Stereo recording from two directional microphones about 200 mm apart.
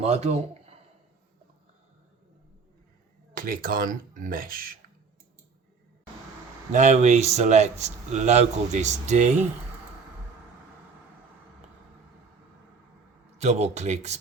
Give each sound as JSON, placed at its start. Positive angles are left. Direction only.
{"t": 0.0, "sound": "a man's voice", "side_deg": -35}
{"t": 3.3, "sound": "speech", "side_deg": -45}
{"t": 6.7, "sound": "speech", "side_deg": -35}
{"t": 13.4, "sound": "speech", "side_deg": -35}